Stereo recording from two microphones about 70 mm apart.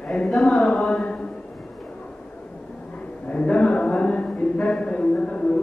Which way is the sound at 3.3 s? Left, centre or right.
Centre.